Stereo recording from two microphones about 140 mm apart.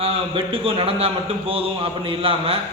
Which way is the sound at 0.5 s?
40° right (ahead or behind).